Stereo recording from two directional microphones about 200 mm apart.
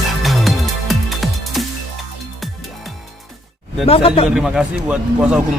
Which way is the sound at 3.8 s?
30° left (ahead or behind).